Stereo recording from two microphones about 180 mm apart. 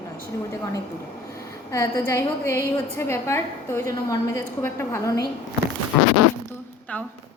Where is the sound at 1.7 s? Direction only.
15° left (ahead or behind).